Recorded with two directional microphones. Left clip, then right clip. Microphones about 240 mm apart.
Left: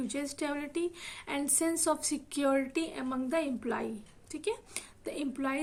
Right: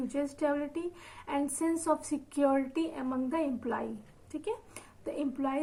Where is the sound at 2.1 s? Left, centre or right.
Left.